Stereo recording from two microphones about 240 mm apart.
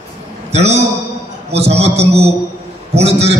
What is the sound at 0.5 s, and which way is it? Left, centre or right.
A man's voice, right.